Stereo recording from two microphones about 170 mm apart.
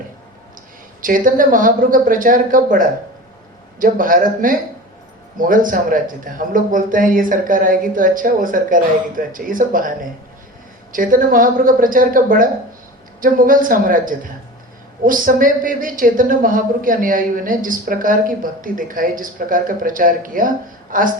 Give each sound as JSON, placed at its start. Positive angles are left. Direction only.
{"t": 1.0, "sound": "a woman's voice", "side_deg": -50}
{"t": 10.9, "sound": "a woman's voice", "side_deg": -55}